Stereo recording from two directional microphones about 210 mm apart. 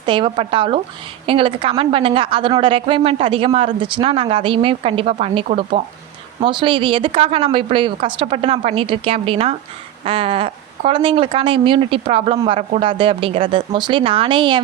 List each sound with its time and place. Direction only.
0.0 s speech: 25° right (ahead or behind)